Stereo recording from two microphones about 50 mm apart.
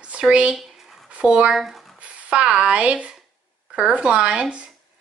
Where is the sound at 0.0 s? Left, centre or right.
Right.